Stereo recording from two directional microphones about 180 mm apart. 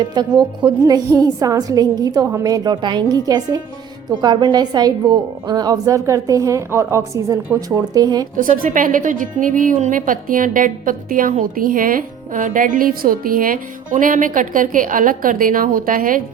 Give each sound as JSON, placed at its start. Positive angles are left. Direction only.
{"t": 0.0, "sound": "a woman's voice", "side_deg": -25}
{"t": 8.4, "sound": "a woman's voice", "side_deg": -50}